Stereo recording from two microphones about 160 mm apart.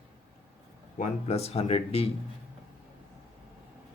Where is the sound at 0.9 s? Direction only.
40° left (ahead or behind).